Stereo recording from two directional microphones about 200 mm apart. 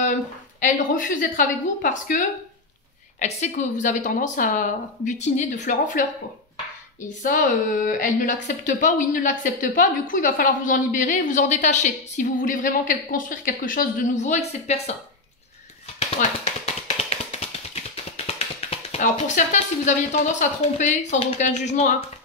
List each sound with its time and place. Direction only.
0.6 s a woman's voice: 40° left (ahead or behind)
7.2 s a woman's voice: 40° left (ahead or behind)
16.2 s a woman's voice: 40° left (ahead or behind)
16.8 s music: 30° left (ahead or behind)
18.9 s a woman's voice: 35° left (ahead or behind)